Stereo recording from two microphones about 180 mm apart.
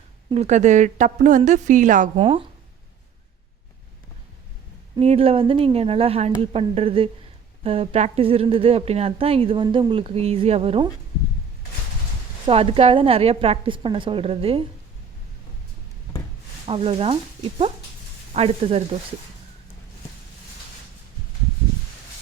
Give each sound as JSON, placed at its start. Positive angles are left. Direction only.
{"t": 0.3, "sound": "a woman's voice", "side_deg": -35}
{"t": 2.1, "sound": "a woman's voice", "side_deg": -30}
{"t": 4.9, "sound": "a woman's voice", "side_deg": -35}
{"t": 12.5, "sound": "a woman's voice", "side_deg": -30}
{"t": 16.6, "sound": "a woman's voice", "side_deg": -30}
{"t": 18.3, "sound": "a woman's voice", "side_deg": -35}